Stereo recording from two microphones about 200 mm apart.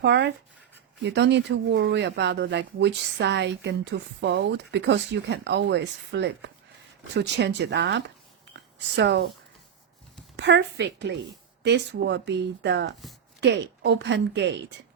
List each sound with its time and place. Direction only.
0.0 s speech: 60° right (ahead or behind)
10.3 s speech: 60° right (ahead or behind)